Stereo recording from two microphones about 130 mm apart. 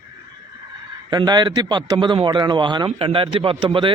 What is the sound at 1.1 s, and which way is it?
A man's voice, 35° right (ahead or behind).